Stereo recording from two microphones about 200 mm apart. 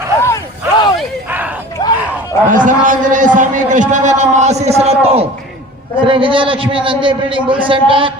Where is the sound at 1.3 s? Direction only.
10° right (ahead or behind).